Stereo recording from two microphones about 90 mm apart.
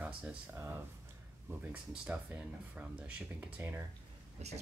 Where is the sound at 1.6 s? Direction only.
15° right (ahead or behind).